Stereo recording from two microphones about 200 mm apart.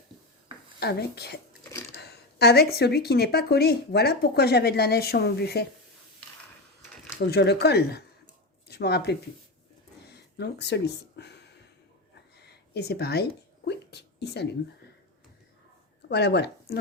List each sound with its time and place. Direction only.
0.8 s speech: 55° left (ahead or behind)
7.3 s speech: 55° left (ahead or behind)
12.4 s a sound: 55° left (ahead or behind)
16.0 s speech: 55° left (ahead or behind)